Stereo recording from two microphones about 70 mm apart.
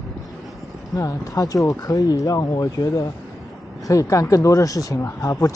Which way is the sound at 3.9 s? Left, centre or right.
Left.